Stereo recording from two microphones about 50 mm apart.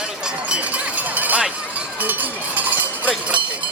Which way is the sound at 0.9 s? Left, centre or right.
Right.